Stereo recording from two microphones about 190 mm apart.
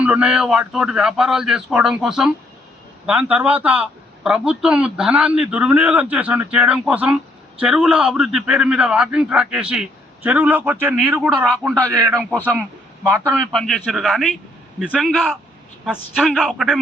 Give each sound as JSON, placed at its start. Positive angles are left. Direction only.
{"t": 0.0, "sound": "a man's voice", "side_deg": -5}
{"t": 11.2, "sound": "a man's voice", "side_deg": 0}
{"t": 11.7, "sound": "a man's voice", "side_deg": -15}
{"t": 13.5, "sound": "a man's voice", "side_deg": 0}